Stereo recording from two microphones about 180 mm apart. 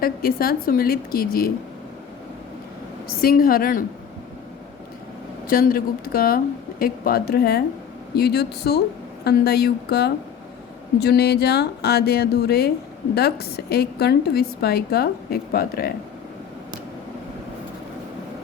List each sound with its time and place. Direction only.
0.0 s a woman's voice: 55° left (ahead or behind)
3.2 s a woman's voice: 55° left (ahead or behind)
5.5 s a woman's voice: 55° left (ahead or behind)